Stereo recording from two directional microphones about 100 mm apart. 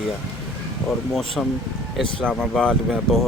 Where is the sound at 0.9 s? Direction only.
5° left (ahead or behind).